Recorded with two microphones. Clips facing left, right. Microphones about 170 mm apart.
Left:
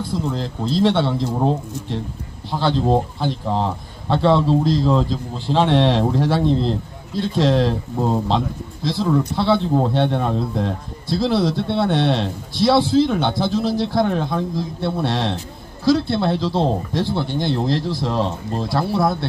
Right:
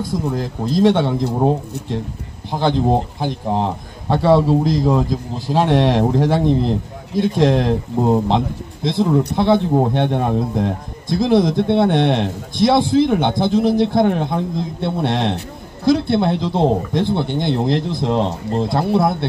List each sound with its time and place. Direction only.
0.0 s a man's voice: 15° right (ahead or behind)
2.5 s a man's voice: 15° right (ahead or behind)